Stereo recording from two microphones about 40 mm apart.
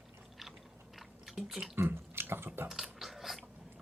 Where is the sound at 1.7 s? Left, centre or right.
Right.